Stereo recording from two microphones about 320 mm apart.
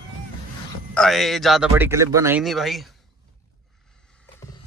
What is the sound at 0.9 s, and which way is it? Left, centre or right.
Speech, centre.